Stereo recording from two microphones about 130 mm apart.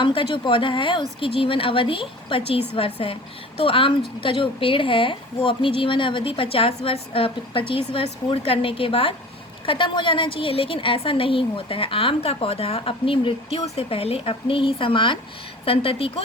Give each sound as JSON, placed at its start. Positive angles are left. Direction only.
{"t": 0.0, "sound": "speech", "side_deg": 40}